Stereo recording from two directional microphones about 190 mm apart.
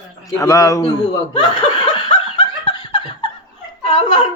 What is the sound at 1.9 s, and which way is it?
Laughter, 25° left (ahead or behind).